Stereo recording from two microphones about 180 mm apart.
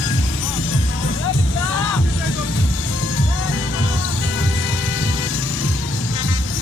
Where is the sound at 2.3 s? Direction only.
90° left.